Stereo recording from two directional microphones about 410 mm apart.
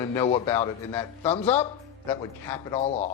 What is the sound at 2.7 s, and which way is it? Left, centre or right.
Speech, centre.